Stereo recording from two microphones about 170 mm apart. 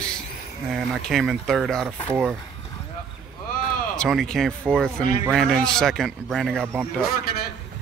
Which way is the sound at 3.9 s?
Centre (ahead or behind).